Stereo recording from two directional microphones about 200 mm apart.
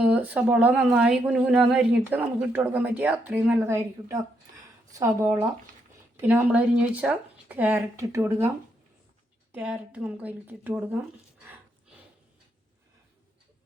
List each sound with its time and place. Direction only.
0.0 s speech: 5° right (ahead or behind)
9.5 s speech: 5° right (ahead or behind)